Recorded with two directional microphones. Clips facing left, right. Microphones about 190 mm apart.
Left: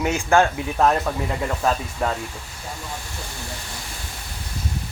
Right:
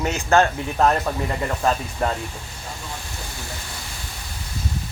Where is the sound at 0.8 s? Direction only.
Centre (ahead or behind).